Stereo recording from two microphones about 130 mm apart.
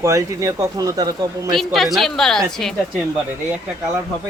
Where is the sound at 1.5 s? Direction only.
Centre (ahead or behind).